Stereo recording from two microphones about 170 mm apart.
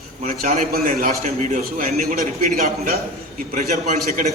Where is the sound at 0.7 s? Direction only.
55° right (ahead or behind).